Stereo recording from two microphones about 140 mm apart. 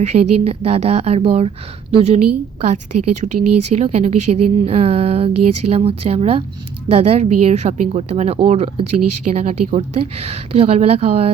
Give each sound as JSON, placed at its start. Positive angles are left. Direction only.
{"t": 0.0, "sound": "a woman's voice", "side_deg": -50}